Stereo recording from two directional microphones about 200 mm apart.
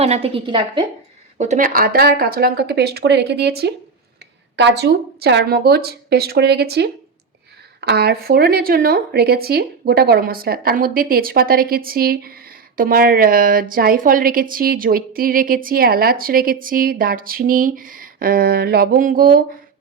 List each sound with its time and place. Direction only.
0.0 s a woman's voice: 30° right (ahead or behind)
1.4 s speech: 40° right (ahead or behind)